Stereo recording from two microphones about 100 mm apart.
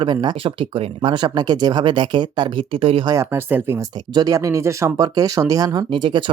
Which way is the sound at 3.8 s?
40° right (ahead or behind).